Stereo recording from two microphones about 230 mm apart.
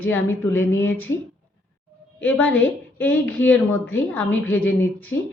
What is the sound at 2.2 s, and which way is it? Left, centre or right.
A woman's voice, centre.